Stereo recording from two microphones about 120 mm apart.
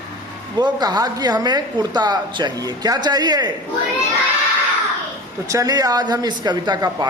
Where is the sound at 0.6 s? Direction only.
35° right (ahead or behind).